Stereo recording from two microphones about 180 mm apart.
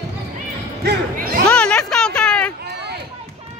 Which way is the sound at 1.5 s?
5° left (ahead or behind).